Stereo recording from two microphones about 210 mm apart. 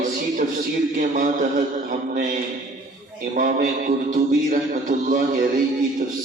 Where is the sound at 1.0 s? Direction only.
40° right (ahead or behind).